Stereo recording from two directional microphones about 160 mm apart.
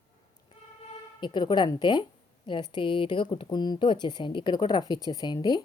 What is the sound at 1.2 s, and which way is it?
A woman's voice, 30° left (ahead or behind).